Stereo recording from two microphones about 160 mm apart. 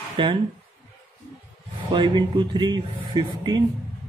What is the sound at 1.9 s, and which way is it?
A man's voice, 30° right (ahead or behind).